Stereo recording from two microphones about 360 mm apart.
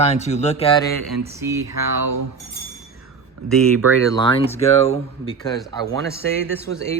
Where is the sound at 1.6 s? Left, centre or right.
Right.